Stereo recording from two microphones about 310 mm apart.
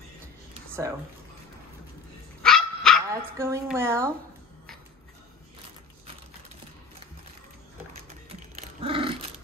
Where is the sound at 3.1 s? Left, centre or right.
Centre.